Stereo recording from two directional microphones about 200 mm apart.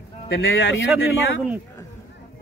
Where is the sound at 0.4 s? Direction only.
65° left (ahead or behind).